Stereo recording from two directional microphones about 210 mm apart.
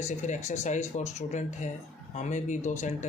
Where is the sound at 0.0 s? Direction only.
35° left (ahead or behind).